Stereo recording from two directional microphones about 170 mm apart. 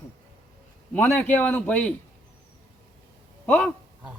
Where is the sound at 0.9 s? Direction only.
10° left (ahead or behind).